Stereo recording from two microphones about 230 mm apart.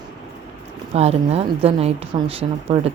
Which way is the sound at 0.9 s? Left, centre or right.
Right.